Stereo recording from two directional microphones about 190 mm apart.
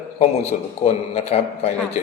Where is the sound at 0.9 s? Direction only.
35° left (ahead or behind).